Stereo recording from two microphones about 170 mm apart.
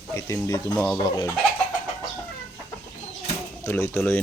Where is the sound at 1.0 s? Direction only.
25° left (ahead or behind).